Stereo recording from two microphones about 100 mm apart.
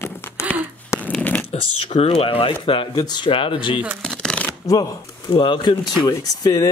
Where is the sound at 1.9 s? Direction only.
90° left; by 2.5 s 65° left (ahead or behind).